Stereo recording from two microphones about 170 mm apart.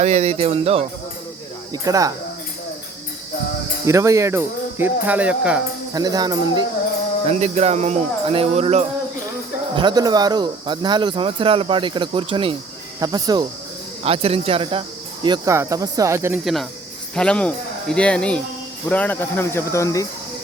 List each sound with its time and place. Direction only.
0.0 s speech: 40° right (ahead or behind)
1.7 s speech: 20° right (ahead or behind)
3.8 s speech: 15° right (ahead or behind)
5.9 s speech: 20° right (ahead or behind)
7.3 s speech: 40° right (ahead or behind)
9.7 s speech: 25° right (ahead or behind)
14.0 s speech: 35° right (ahead or behind); by 16.4 s 15° right (ahead or behind)
16.4 s a man's voice: centre (ahead or behind); by 20.1 s 20° left (ahead or behind)